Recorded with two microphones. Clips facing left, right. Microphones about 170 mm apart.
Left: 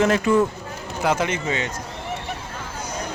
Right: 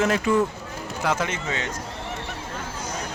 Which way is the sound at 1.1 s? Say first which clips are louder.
Left 4 dB; 15° left (ahead or behind).